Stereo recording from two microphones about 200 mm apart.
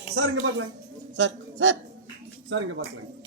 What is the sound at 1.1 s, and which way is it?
Speech, 65° right (ahead or behind).